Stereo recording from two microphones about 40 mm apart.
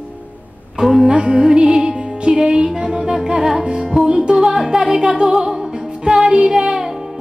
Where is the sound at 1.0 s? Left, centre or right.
Centre.